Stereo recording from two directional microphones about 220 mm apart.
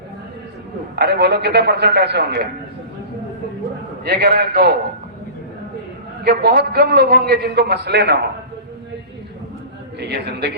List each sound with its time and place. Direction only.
0.9 s a man's voice: 50° right (ahead or behind)
4.0 s a man's voice: 45° right (ahead or behind)
6.2 s a man's voice: 45° right (ahead or behind)
10.0 s a man's voice: 50° right (ahead or behind)